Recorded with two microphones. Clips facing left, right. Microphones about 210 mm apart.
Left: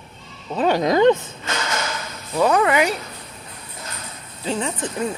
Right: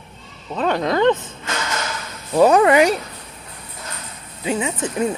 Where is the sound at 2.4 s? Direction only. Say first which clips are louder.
Right 5 dB; 25° right (ahead or behind).